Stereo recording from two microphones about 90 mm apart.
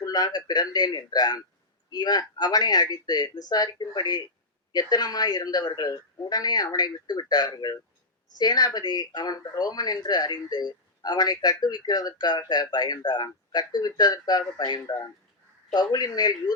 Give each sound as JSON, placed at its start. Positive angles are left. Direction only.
{"t": 0.0, "sound": "speech", "side_deg": 45}